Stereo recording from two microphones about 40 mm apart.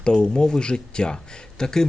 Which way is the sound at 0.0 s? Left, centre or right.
Left.